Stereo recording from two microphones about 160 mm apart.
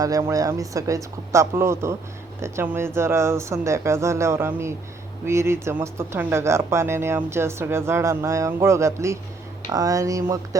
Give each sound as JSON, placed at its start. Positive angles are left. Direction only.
{"t": 0.0, "sound": "speech", "side_deg": -20}